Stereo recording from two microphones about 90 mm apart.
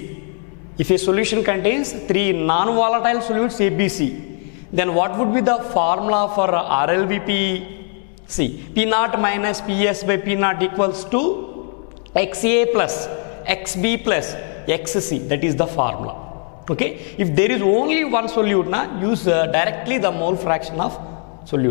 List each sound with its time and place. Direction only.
0.8 s a man's voice: 10° left (ahead or behind)